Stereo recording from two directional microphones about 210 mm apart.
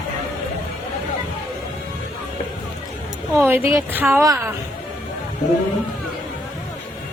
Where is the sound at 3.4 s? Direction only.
10° right (ahead or behind).